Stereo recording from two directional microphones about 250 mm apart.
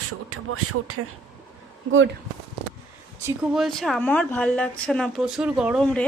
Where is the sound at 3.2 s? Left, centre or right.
Centre.